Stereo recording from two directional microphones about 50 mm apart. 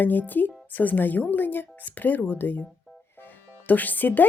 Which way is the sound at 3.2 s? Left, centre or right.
Left.